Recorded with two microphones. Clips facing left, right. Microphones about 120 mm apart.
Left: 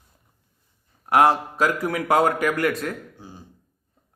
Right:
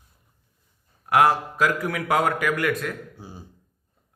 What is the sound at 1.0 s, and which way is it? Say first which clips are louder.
A man's voice: left 1 dB; 30° left (ahead or behind).